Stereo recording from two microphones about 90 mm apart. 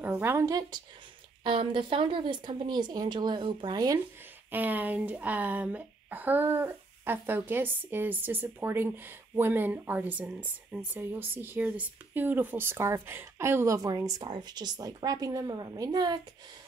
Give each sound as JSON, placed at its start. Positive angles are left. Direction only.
{"t": 0.0, "sound": "speech", "side_deg": -20}
{"t": 0.5, "sound": "a woman's voice", "side_deg": -45}
{"t": 1.4, "sound": "speech", "side_deg": -70}
{"t": 4.5, "sound": "speech", "side_deg": -20}
{"t": 14.2, "sound": "a woman's voice", "side_deg": -55}